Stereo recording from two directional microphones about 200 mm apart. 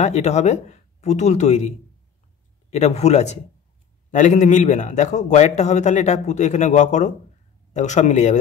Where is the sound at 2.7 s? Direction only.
35° left (ahead or behind).